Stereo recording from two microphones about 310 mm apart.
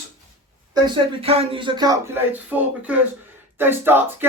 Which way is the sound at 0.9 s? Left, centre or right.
Centre.